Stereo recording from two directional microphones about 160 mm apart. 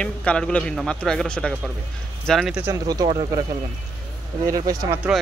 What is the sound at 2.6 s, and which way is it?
Speech, 20° right (ahead or behind).